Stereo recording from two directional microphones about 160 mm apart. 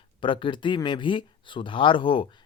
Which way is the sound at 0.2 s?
30° left (ahead or behind).